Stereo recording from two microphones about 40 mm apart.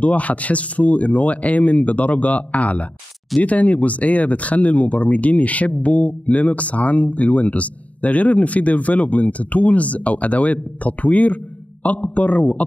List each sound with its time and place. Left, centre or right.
0.0 s speech: left